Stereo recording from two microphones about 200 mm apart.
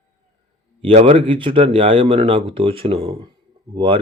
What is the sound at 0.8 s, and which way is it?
Speech, 30° right (ahead or behind).